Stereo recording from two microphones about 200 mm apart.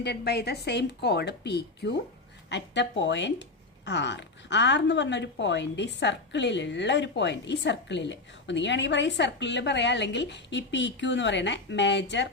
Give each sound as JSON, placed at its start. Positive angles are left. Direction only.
{"t": 0.0, "sound": "speech", "side_deg": 55}